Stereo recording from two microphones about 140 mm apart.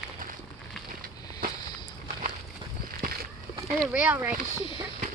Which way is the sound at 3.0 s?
90° right.